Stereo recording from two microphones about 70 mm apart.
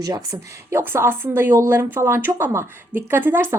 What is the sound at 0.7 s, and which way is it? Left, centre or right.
Speech, right.